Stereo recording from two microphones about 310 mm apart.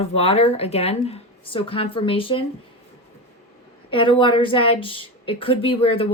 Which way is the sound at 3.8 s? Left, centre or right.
Centre.